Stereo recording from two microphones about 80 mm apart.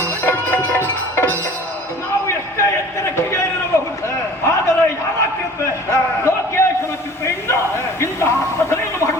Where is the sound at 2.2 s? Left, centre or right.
Left.